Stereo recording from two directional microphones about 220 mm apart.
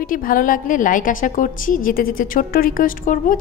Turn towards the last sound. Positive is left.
turn(degrees=35)  # may be behind; listen again after turning